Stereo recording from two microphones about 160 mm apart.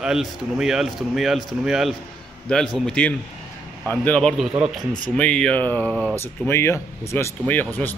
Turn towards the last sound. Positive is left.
turn(degrees=10)  # may be behind; listen again after turning